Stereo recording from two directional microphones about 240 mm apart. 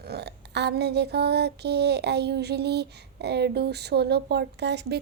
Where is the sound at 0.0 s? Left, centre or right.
Right.